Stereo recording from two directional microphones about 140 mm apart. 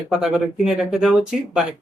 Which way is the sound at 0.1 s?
5° right (ahead or behind).